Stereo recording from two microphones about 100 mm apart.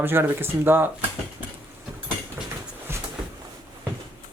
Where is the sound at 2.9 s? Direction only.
25° right (ahead or behind).